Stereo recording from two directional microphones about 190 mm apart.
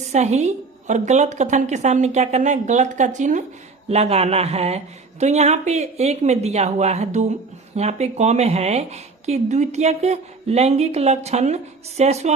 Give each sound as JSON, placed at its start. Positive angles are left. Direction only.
{"t": 0.1, "sound": "speech", "side_deg": -35}